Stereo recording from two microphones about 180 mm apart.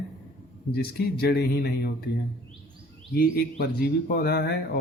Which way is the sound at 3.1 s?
60° left (ahead or behind).